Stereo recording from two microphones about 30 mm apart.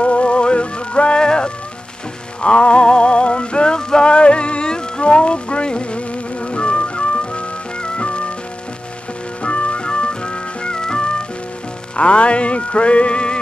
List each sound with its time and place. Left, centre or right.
0.0 s music: left
9.4 s music: left
12.0 s music: left